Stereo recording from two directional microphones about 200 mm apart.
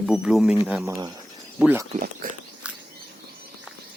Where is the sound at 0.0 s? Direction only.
Centre (ahead or behind).